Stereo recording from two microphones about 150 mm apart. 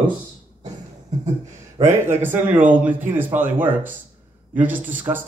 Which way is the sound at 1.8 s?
15° right (ahead or behind).